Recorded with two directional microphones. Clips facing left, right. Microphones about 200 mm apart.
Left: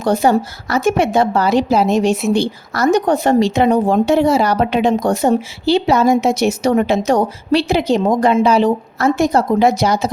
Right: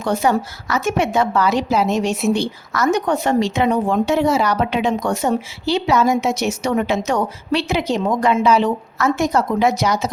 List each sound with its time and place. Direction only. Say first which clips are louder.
0.0 s speech: left 4 dB; 35° left (ahead or behind)